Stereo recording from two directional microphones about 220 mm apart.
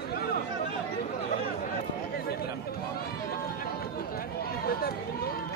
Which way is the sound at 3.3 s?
40° left (ahead or behind).